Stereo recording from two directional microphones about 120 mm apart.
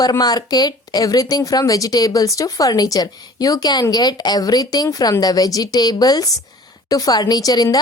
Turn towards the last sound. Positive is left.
turn(degrees=30)  # may be behind; listen again after turning